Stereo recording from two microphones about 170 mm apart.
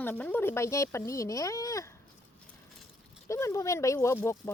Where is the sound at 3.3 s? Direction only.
15° left (ahead or behind).